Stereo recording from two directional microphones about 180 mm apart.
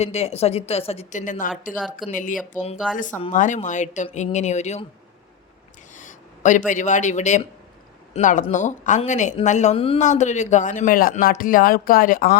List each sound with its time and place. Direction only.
0.0 s speech: 35° left (ahead or behind)
2.7 s speech: centre (ahead or behind)
3.3 s speech: 45° left (ahead or behind)
6.0 s speech: 45° left (ahead or behind)